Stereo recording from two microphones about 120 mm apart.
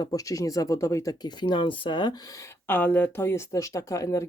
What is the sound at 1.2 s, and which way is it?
Speech, 40° left (ahead or behind).